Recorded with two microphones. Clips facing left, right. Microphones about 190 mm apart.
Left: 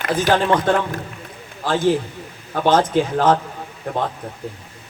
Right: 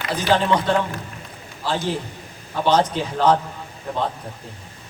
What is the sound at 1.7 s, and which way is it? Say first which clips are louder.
A man's voice: left 6 dB; 50° left (ahead or behind).